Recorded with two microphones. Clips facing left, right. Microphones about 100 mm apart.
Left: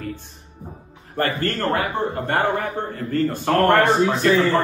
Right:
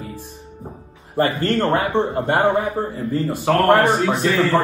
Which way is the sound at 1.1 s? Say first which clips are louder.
Right 4 dB; 20° right (ahead or behind).